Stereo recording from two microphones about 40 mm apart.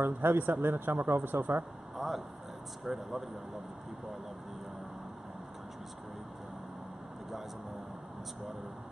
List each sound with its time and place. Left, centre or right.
0.0 s speech: right
2.0 s speech: centre